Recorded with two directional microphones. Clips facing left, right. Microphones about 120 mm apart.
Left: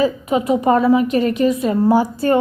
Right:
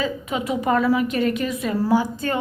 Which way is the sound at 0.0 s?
35° left (ahead or behind).